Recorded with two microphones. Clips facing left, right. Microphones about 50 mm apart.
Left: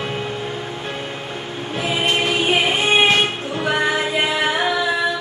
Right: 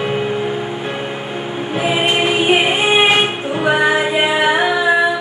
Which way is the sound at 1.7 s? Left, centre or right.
Right.